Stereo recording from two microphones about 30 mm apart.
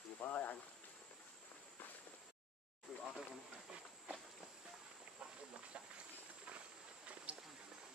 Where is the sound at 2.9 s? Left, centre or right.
Centre.